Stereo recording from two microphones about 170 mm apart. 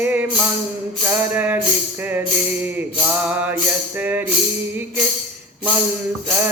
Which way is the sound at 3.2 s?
10° right (ahead or behind).